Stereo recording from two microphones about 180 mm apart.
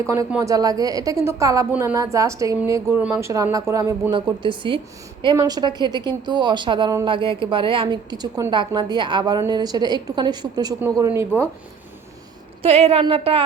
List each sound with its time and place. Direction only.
0.0 s a woman's voice: 15° right (ahead or behind)
12.6 s a woman's voice: 35° right (ahead or behind)